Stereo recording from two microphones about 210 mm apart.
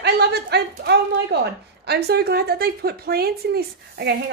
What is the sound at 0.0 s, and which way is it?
A woman's voice, 50° right (ahead or behind).